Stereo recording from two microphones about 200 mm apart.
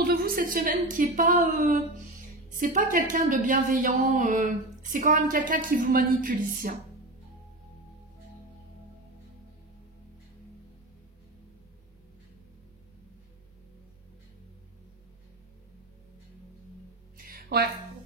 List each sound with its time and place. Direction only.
0.0 s a woman's voice: 50° right (ahead or behind)
17.2 s music: 50° right (ahead or behind)